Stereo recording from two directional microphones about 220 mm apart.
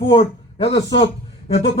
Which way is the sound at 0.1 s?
25° left (ahead or behind).